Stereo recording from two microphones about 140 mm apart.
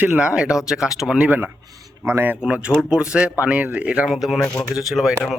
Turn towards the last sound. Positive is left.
turn(degrees=0)  # may be behind; listen again after turning